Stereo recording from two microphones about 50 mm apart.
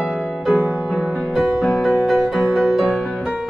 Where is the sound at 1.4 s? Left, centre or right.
Centre.